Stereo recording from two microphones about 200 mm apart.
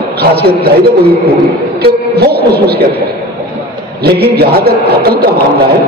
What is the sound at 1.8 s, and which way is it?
Speech, 50° right (ahead or behind).